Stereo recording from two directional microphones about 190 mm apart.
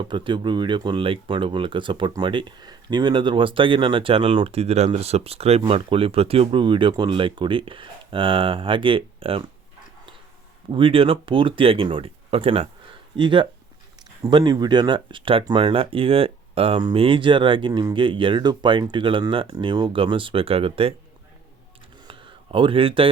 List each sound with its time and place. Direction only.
0.0 s speech: 25° right (ahead or behind)
10.7 s speech: 30° right (ahead or behind)
22.0 s a sound: 25° right (ahead or behind)